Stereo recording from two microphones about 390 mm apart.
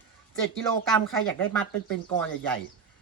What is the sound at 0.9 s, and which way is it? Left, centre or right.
Speech, centre.